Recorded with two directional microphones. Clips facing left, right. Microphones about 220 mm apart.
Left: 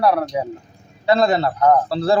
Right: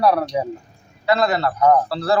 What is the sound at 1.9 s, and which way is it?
Speech, 25° left (ahead or behind).